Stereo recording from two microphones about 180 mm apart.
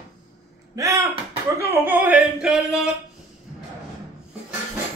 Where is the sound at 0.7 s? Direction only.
20° right (ahead or behind).